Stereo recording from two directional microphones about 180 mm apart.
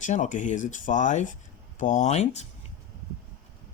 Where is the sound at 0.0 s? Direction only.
45° left (ahead or behind).